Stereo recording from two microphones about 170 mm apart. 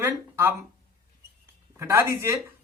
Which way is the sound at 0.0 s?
15° right (ahead or behind).